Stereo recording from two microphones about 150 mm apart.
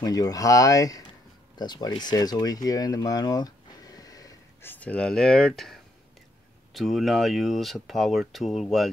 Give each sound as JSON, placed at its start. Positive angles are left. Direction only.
{"t": 0.0, "sound": "speech", "side_deg": 25}